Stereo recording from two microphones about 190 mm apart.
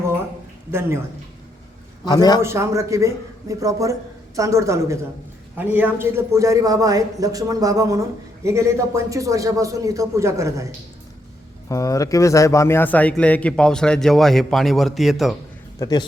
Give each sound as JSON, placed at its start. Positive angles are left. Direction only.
{"t": 0.7, "sound": "a man's voice", "side_deg": -15}
{"t": 2.0, "sound": "a man's voice", "side_deg": 20}
{"t": 2.4, "sound": "a man's voice", "side_deg": -15}
{"t": 11.7, "sound": "a man's voice", "side_deg": 15}
{"t": 15.8, "sound": "a man's voice", "side_deg": 20}